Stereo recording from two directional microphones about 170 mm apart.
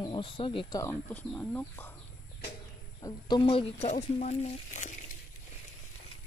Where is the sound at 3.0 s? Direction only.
25° left (ahead or behind); by 4.9 s 45° left (ahead or behind).